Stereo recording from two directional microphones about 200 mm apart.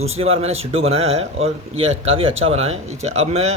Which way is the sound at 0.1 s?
30° right (ahead or behind).